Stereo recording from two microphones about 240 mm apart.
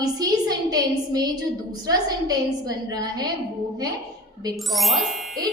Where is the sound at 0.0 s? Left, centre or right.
Centre.